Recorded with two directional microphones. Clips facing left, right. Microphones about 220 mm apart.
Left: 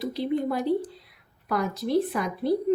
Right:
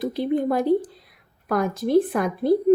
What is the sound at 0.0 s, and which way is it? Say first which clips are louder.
Speech: right 4 dB; 50° right (ahead or behind).